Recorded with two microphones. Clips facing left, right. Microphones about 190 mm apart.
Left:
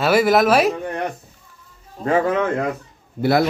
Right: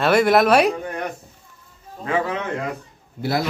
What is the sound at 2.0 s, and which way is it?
Speech, 45° left (ahead or behind).